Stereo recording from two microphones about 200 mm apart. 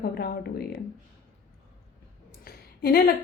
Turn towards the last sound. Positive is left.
turn(degrees=50)  # may be behind; listen again after turning